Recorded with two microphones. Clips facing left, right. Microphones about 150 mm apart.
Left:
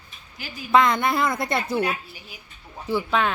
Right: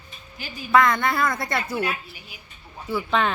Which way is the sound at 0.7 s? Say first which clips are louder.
Even; 20° left (ahead or behind).